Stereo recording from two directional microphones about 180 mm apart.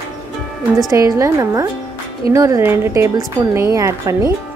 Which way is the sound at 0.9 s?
15° right (ahead or behind).